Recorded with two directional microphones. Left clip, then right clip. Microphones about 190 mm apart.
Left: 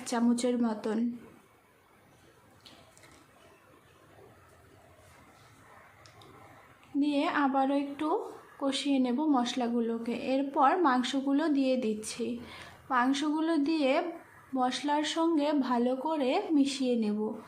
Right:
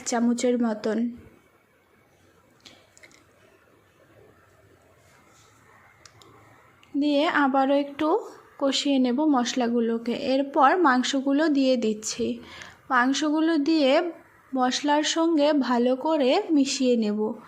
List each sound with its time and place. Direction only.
0.0 s a woman's voice: 25° right (ahead or behind)
7.0 s a woman's voice: 35° right (ahead or behind)